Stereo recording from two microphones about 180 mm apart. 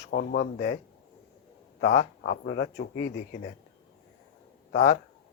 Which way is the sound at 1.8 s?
65° left (ahead or behind).